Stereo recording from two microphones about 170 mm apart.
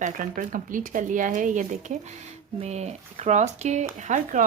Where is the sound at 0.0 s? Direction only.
50° right (ahead or behind).